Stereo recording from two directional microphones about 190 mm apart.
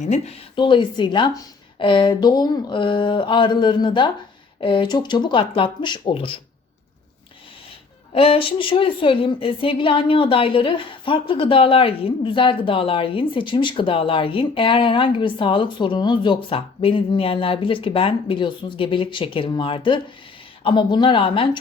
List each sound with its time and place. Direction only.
0.0 s a woman's voice: 35° left (ahead or behind)
8.1 s a woman's voice: 30° left (ahead or behind)